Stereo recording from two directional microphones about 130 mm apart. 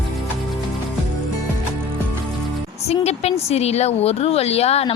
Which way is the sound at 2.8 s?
55° left (ahead or behind).